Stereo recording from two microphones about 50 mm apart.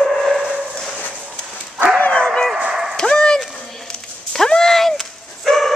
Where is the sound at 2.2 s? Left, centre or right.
Centre.